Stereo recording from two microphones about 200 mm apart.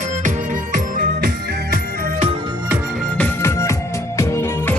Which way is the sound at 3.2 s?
10° left (ahead or behind).